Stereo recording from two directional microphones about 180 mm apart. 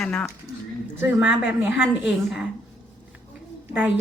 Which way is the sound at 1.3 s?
75° left (ahead or behind).